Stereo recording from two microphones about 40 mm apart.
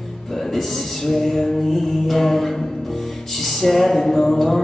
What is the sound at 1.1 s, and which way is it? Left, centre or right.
Music, centre.